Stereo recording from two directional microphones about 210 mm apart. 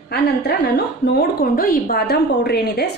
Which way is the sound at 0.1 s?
50° left (ahead or behind).